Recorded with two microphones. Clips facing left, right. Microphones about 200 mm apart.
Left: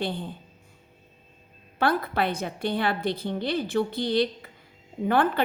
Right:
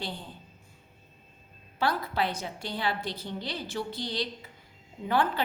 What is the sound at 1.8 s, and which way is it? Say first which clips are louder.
A woman's voice: left 4 dB; 55° left (ahead or behind).